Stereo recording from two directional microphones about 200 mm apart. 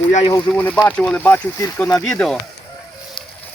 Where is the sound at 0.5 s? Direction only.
5° left (ahead or behind).